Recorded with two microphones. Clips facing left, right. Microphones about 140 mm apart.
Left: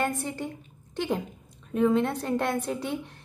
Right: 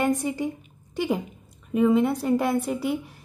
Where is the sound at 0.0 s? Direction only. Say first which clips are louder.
Right 5 dB; 15° right (ahead or behind).